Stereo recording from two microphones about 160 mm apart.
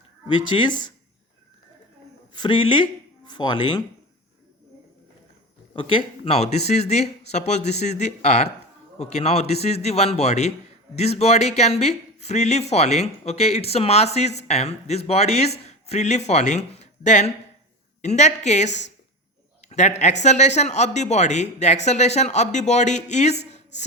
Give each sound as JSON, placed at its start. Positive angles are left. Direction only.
{"t": 0.5, "sound": "speech", "side_deg": 30}
{"t": 2.4, "sound": "speech", "side_deg": 30}
{"t": 5.7, "sound": "speech", "side_deg": 30}